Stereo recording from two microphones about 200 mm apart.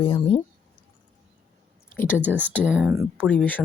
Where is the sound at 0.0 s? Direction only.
25° left (ahead or behind).